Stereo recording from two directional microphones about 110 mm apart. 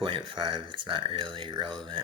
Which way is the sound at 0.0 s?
50° right (ahead or behind).